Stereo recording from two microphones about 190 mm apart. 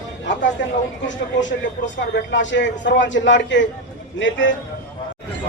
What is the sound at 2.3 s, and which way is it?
Speech, 70° left (ahead or behind).